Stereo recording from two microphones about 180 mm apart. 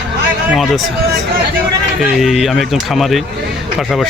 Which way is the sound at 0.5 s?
Centre (ahead or behind).